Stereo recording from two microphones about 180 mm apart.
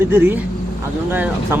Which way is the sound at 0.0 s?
10° right (ahead or behind).